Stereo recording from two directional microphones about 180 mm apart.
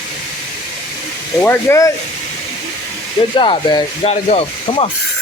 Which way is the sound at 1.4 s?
10° left (ahead or behind).